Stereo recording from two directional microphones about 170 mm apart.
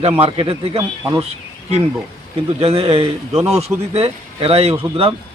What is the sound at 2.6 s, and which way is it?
Speech, 35° right (ahead or behind).